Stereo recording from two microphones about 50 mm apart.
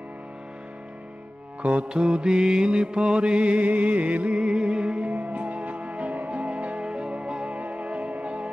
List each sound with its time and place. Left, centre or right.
1.6 s mantra: right